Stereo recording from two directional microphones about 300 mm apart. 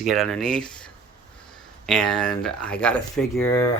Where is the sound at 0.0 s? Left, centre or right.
Centre.